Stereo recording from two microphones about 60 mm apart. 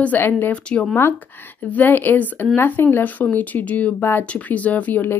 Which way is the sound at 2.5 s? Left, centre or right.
Left.